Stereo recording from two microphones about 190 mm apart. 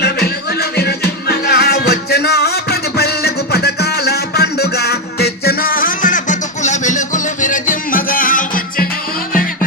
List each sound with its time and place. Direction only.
0.8 s music: 60° left (ahead or behind)